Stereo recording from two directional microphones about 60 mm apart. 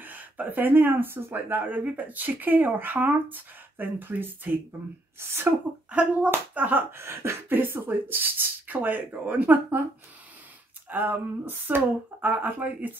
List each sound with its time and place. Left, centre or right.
0.0 s speech: right
5.9 s speech: right
7.0 s speech: right
10.9 s speech: right